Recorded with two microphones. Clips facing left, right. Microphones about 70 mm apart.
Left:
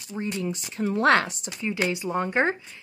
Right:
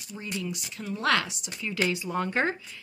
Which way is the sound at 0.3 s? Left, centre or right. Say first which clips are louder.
Left 1 dB; left.